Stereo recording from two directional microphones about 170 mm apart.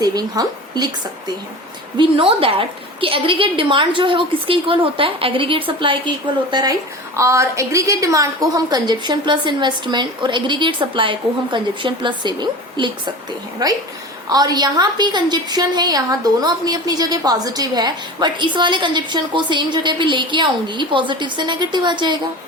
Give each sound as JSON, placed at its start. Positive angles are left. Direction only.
{"t": 0.0, "sound": "a woman's voice", "side_deg": -20}
{"t": 2.0, "sound": "a woman's voice", "side_deg": -30}